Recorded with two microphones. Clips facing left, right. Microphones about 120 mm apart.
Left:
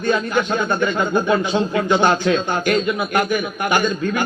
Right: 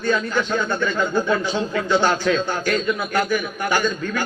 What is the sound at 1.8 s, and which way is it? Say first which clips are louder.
Speech: left 1 dB; 20° left (ahead or behind).